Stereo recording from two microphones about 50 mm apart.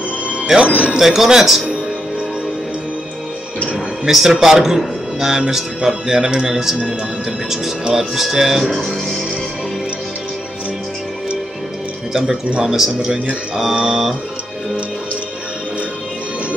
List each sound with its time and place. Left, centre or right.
0.6 s speech: right
0.9 s speech: centre
4.0 s speech: centre
12.1 s speech: centre